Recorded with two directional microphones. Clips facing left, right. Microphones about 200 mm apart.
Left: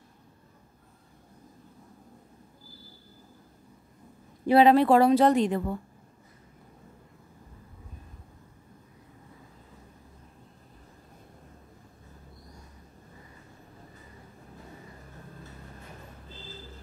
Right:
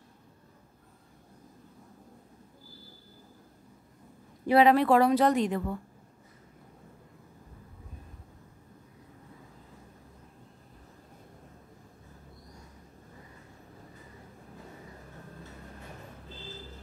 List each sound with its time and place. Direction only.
4.5 s a woman's voice: 30° left (ahead or behind)